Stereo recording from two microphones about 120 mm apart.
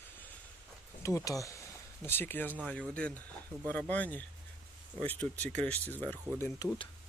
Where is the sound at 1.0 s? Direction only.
25° left (ahead or behind).